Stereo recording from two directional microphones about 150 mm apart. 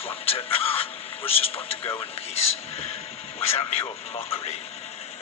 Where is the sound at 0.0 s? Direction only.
40° left (ahead or behind).